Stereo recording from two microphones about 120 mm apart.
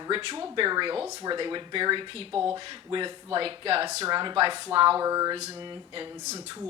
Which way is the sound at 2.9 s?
40° right (ahead or behind).